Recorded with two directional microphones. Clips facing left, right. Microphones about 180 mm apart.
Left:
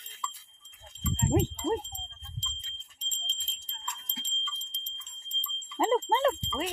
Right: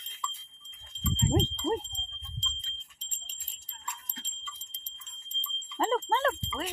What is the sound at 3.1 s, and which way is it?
Jingle bell, 10° right (ahead or behind).